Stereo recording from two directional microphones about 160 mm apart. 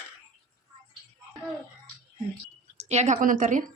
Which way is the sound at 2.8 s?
45° right (ahead or behind).